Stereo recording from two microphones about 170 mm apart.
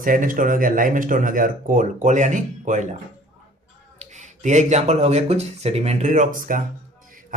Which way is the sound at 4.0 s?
45° right (ahead or behind).